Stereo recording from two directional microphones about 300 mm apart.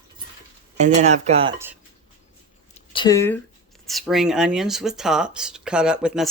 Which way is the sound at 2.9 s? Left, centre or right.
Centre.